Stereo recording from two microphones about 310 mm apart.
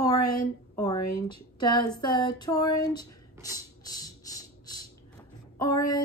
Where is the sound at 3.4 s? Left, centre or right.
Centre.